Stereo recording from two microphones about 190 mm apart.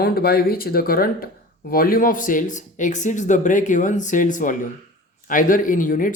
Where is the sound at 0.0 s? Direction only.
55° left (ahead or behind).